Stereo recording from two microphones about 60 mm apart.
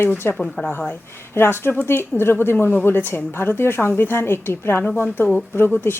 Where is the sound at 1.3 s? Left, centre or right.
Left.